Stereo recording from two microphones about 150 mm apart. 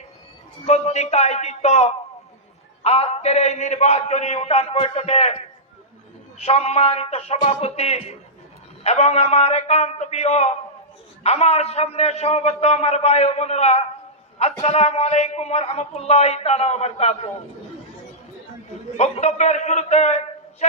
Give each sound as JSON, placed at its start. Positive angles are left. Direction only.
{"t": 0.6, "sound": "a man's voice", "side_deg": 45}
{"t": 6.4, "sound": "a man's voice", "side_deg": 45}
{"t": 18.9, "sound": "a man's voice", "side_deg": 50}